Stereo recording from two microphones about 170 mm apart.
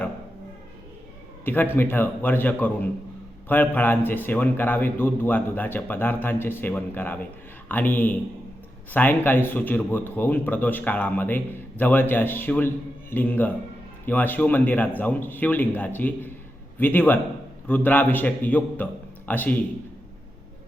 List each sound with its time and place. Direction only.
1.7 s a man's voice: 10° left (ahead or behind)